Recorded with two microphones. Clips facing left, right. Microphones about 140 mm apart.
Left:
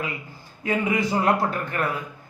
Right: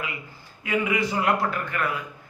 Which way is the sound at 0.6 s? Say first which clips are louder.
Left 1 dB; 40° left (ahead or behind).